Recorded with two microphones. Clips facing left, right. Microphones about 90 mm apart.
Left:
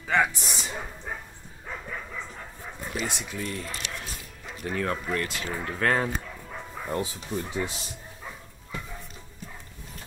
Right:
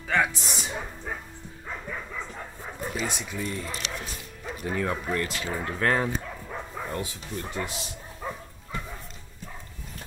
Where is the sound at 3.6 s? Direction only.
25° right (ahead or behind).